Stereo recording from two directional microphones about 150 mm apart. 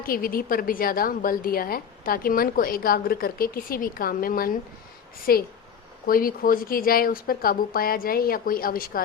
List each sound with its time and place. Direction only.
0.1 s a woman's voice: 75° left (ahead or behind)